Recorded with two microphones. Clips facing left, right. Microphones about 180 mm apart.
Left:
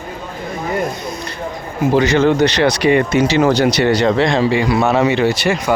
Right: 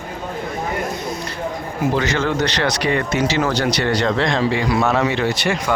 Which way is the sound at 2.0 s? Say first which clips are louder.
Left 10 dB; 15° left (ahead or behind).